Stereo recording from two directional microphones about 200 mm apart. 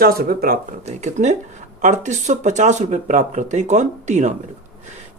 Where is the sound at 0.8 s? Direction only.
35° right (ahead or behind).